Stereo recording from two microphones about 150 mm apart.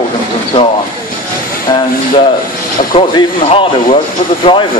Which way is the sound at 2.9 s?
35° left (ahead or behind).